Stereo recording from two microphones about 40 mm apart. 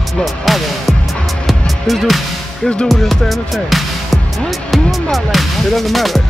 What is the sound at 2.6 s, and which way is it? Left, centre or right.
Music, centre.